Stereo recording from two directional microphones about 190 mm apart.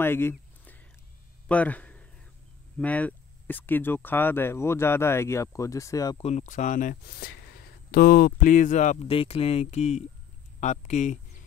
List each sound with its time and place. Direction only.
0.0 s a sound: 10° left (ahead or behind)
1.5 s a man's voice: 5° left (ahead or behind)
6.2 s speech: 40° left (ahead or behind)